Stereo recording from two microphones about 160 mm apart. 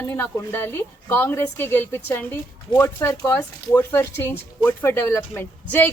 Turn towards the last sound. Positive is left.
turn(degrees=15)  # may be behind; listen again after turning